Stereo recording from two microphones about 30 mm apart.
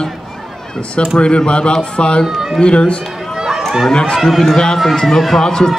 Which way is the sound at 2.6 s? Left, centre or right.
Left.